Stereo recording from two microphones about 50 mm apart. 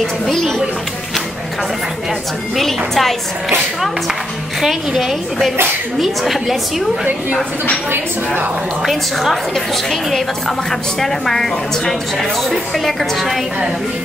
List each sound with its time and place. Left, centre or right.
0.0 s a woman's voice: centre
2.5 s a woman's voice: centre
10.7 s a woman's voice: centre